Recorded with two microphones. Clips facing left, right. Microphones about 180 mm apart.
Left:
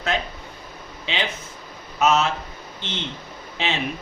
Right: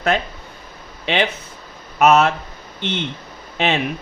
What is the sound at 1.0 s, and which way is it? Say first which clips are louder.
Speech: right 8 dB; 60° right (ahead or behind).